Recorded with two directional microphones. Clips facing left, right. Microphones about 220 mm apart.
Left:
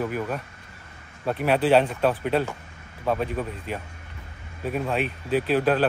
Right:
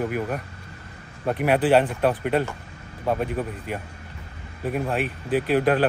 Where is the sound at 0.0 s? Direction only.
10° right (ahead or behind).